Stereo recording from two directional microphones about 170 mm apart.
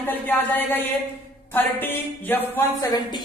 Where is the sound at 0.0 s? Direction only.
10° left (ahead or behind).